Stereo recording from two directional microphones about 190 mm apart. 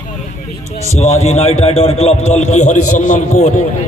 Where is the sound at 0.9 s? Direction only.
35° left (ahead or behind).